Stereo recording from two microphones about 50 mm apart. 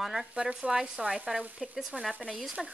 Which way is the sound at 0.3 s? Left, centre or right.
Right.